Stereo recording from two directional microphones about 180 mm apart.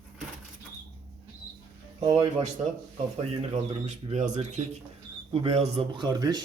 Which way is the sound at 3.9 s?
40° right (ahead or behind).